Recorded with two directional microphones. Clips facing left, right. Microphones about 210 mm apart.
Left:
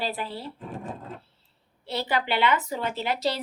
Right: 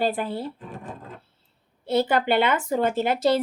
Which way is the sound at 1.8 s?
50° right (ahead or behind).